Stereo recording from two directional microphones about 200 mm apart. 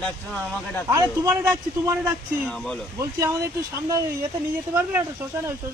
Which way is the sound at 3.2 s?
15° right (ahead or behind).